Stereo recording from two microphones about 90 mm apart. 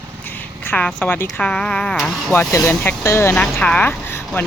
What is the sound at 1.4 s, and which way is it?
Speech, 10° left (ahead or behind).